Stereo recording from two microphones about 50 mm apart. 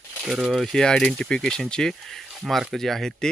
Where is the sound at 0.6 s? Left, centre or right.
Centre.